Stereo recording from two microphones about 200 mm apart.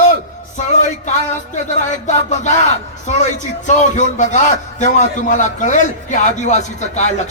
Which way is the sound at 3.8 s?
35° left (ahead or behind).